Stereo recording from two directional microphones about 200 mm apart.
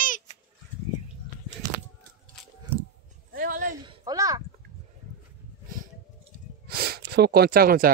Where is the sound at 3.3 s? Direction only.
45° right (ahead or behind).